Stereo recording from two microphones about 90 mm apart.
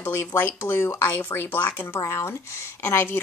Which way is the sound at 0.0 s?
30° left (ahead or behind).